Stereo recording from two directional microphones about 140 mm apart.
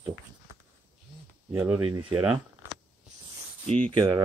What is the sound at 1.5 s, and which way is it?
Speech, 20° right (ahead or behind).